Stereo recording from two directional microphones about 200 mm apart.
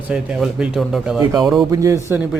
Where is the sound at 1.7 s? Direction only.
15° right (ahead or behind).